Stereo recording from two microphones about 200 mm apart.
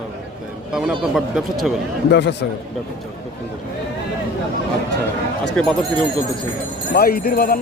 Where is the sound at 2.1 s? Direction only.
60° left (ahead or behind).